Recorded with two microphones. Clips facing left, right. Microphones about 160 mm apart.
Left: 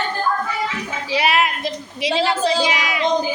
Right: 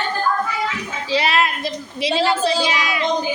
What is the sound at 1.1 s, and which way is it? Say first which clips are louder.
Child singing: even; 15° left (ahead or behind).